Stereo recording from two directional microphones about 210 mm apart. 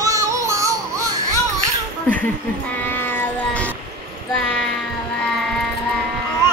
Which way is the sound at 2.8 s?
10° left (ahead or behind).